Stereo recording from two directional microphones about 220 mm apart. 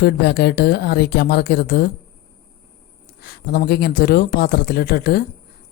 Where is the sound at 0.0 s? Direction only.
45° left (ahead or behind).